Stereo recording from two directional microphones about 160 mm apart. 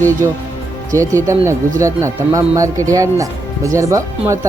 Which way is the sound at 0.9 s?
20° right (ahead or behind).